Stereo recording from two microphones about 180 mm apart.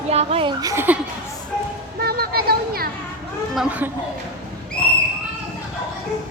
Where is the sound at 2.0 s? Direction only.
60° right (ahead or behind).